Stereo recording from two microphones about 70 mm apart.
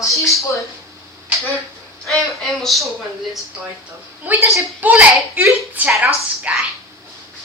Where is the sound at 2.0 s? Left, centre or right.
Centre.